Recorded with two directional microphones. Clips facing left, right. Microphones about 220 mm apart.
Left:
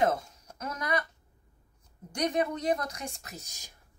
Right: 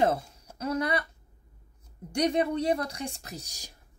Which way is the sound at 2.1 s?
30° right (ahead or behind).